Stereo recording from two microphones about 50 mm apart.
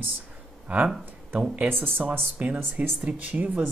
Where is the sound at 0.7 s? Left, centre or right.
Right.